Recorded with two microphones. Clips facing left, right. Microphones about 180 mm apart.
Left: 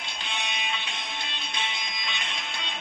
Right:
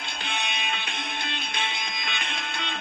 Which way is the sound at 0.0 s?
60° right (ahead or behind).